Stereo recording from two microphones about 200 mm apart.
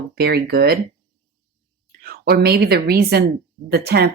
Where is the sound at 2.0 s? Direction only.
50° right (ahead or behind).